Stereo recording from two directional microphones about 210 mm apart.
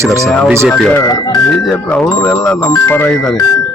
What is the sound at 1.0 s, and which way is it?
Speech, 15° left (ahead or behind).